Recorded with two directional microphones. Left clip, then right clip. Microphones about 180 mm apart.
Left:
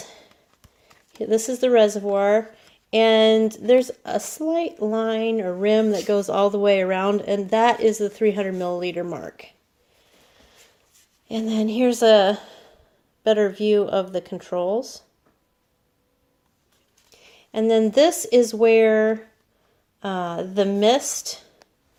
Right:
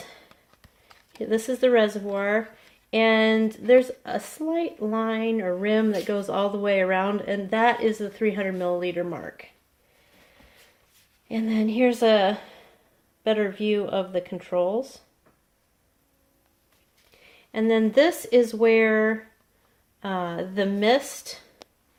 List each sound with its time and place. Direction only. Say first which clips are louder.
0.0 s a sound: left 2 dB; 35° left (ahead or behind)
1.2 s a woman's voice: left 2 dB; 35° left (ahead or behind)
11.3 s a woman's voice: left 2 dB; 35° left (ahead or behind)
17.2 s a woman's voice: left 4 dB; 40° left (ahead or behind)